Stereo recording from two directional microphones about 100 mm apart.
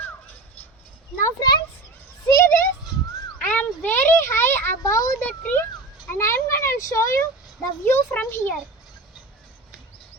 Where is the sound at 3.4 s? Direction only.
15° left (ahead or behind); by 5.1 s 35° left (ahead or behind).